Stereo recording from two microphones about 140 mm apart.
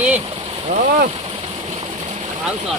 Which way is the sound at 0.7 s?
65° right (ahead or behind).